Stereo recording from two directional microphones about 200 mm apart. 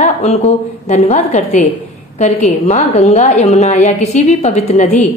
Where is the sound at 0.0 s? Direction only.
35° left (ahead or behind).